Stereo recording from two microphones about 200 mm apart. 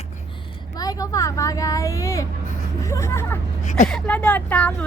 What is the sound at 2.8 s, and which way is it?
Hubbub, 15° left (ahead or behind).